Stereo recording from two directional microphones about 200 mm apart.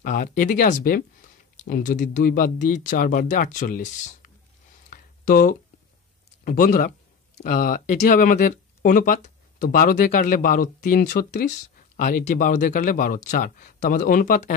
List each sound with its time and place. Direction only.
0.0 s speech: 40° left (ahead or behind)
4.8 s a sound: 45° left (ahead or behind)
6.4 s speech: 45° left (ahead or behind)